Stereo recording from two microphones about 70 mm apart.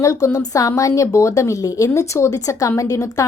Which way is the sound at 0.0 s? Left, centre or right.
Left.